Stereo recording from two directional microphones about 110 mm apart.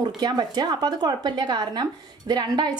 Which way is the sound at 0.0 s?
40° right (ahead or behind).